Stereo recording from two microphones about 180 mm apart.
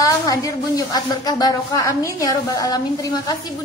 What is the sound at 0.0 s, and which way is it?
A woman's voice, 20° left (ahead or behind).